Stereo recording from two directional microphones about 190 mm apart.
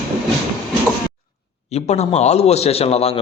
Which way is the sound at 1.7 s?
35° left (ahead or behind).